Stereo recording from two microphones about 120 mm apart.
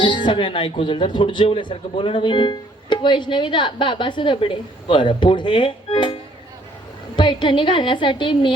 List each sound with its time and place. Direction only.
0.0 s speech: 40° left (ahead or behind)
7.2 s speech: 40° left (ahead or behind)